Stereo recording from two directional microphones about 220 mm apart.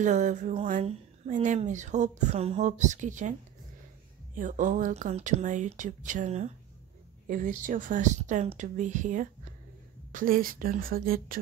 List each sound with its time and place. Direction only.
0.0 s speech: 35° right (ahead or behind)
4.4 s speech: 35° right (ahead or behind)